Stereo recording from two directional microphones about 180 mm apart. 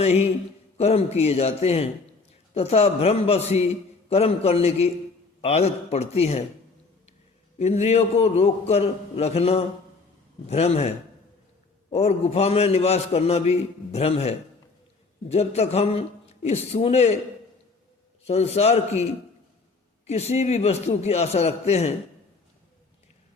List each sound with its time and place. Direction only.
0.0 s a man's voice: 35° left (ahead or behind)
7.6 s a man's voice: 35° left (ahead or behind)
18.3 s a man's voice: 35° left (ahead or behind)
20.1 s a man's voice: 35° left (ahead or behind)